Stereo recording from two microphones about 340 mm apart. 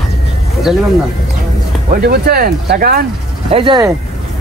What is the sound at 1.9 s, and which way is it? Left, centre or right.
Speech, right.